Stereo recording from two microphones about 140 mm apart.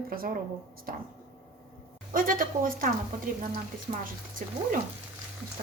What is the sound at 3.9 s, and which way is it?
Speech, 55° right (ahead or behind).